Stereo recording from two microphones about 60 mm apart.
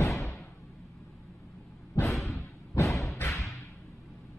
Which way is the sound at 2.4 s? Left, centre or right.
Left.